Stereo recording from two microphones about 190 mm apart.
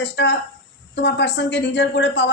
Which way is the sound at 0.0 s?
65° left (ahead or behind).